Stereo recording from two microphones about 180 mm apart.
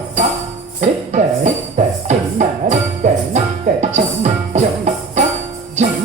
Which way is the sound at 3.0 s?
45° right (ahead or behind).